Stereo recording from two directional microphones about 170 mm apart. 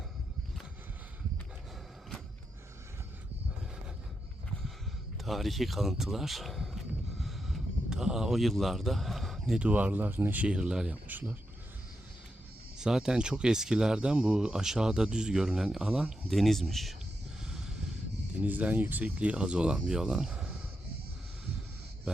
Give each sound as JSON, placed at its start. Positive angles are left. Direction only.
{"t": 5.2, "sound": "speech", "side_deg": 0}
{"t": 12.8, "sound": "speech", "side_deg": -5}
{"t": 18.4, "sound": "speech", "side_deg": -10}